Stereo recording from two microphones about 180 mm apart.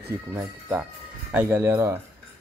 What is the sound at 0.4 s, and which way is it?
Speech, 10° right (ahead or behind).